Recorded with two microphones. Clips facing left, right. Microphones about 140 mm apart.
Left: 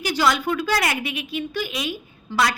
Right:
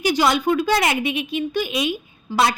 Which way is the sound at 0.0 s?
20° right (ahead or behind).